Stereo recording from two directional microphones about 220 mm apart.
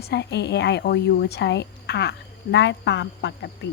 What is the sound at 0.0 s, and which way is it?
Speech, 50° left (ahead or behind).